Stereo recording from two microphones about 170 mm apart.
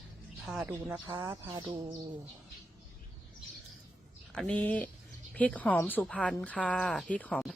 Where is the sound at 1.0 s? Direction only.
25° right (ahead or behind).